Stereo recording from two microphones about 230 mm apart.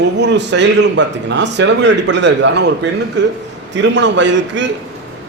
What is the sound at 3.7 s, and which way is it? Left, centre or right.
Speech, right.